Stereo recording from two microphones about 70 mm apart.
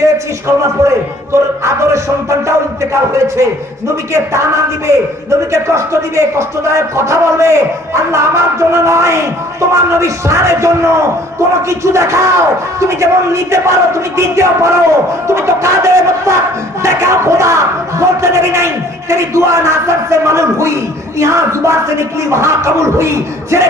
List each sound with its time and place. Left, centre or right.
0.0 s a man's voice: right
11.7 s a man's voice: right